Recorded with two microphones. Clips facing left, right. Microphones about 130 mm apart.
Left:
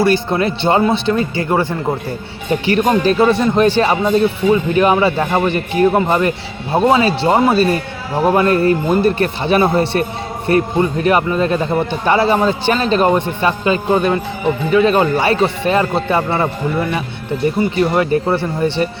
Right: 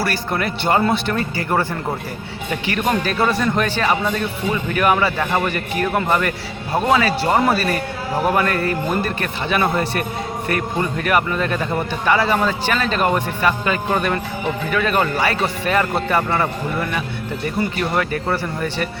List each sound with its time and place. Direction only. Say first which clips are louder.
0.0 s speech: left 7 dB; 25° left (ahead or behind)
2.5 s speech: left 7 dB; 30° left (ahead or behind)